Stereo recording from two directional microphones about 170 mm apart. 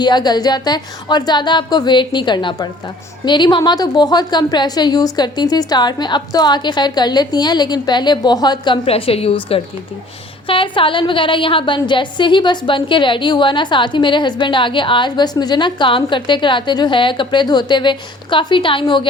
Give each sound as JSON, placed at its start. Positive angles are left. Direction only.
{"t": 0.0, "sound": "a woman's voice", "side_deg": 25}